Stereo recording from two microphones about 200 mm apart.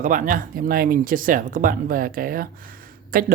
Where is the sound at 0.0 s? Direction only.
40° right (ahead or behind).